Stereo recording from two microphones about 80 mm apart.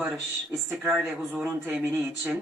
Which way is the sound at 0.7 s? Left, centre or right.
Centre.